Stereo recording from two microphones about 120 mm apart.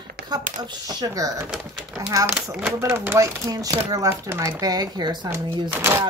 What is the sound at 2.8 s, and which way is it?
Speech, 20° right (ahead or behind).